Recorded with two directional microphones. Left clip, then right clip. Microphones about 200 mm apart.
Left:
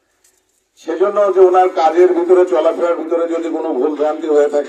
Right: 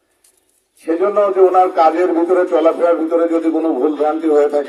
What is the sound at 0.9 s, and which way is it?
A man's voice, 25° right (ahead or behind).